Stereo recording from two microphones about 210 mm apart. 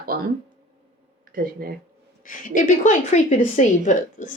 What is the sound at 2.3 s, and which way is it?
A woman's voice, 40° left (ahead or behind).